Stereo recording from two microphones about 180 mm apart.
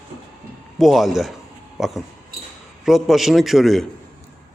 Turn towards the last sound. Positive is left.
turn(degrees=0)  # may be behind; listen again after turning